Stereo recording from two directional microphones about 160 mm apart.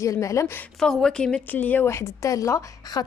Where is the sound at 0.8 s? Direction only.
5° left (ahead or behind).